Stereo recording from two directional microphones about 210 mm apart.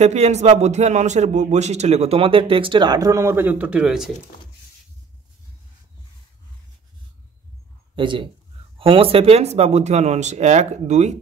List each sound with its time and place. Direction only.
0.0 s speech: 30° right (ahead or behind); by 4.2 s centre (ahead or behind)
7.9 s speech: 25° right (ahead or behind)